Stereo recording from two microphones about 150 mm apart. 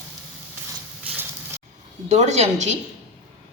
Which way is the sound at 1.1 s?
10° right (ahead or behind).